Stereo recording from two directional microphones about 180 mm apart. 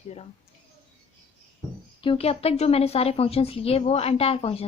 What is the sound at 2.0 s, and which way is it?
A woman's voice, 30° left (ahead or behind).